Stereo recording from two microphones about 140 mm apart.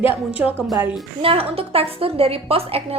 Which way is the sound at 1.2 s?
40° right (ahead or behind).